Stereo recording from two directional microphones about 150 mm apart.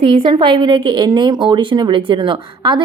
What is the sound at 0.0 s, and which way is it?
A woman's voice, 35° right (ahead or behind).